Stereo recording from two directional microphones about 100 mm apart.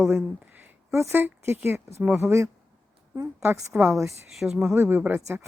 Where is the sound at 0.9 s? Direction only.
25° right (ahead or behind).